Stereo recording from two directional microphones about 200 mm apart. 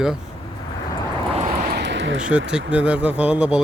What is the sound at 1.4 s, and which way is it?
Vehicle, 40° right (ahead or behind).